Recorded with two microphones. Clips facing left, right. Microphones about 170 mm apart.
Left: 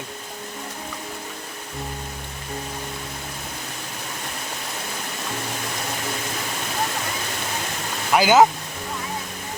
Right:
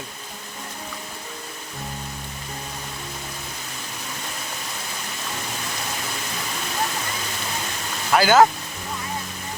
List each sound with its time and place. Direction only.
8.1 s speech: 15° left (ahead or behind)